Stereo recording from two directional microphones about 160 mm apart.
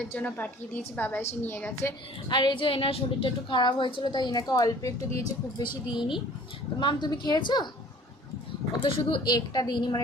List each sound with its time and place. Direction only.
0.0 s a woman's voice: 10° left (ahead or behind)
2.3 s a woman's voice: 30° left (ahead or behind)
8.8 s a woman's voice: 30° left (ahead or behind)